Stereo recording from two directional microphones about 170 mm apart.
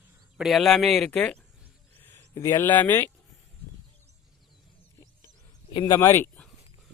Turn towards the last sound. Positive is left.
turn(degrees=15)  # may be behind; listen again after turning